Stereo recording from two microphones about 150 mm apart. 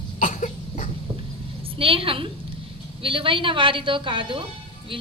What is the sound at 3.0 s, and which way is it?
A woman's voice, 35° right (ahead or behind).